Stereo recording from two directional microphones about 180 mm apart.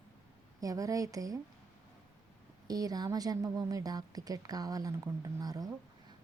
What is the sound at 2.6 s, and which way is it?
Speech, 20° right (ahead or behind).